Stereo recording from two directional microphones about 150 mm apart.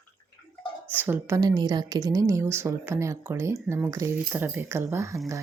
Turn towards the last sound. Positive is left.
turn(degrees=-20)  # may be behind; listen again after turning